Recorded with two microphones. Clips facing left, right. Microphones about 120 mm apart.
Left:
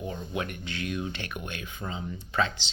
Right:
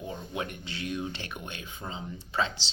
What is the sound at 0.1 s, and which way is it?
Speech, 25° right (ahead or behind).